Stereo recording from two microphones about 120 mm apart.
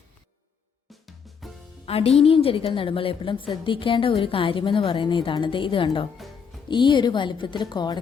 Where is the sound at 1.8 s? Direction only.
55° left (ahead or behind).